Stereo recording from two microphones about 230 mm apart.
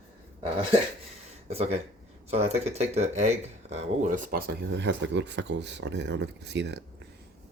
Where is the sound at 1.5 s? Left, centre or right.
Right.